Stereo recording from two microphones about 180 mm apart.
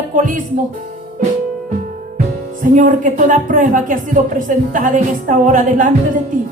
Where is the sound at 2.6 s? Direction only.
45° right (ahead or behind).